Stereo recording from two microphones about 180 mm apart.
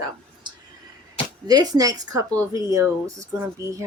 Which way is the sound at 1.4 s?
20° right (ahead or behind).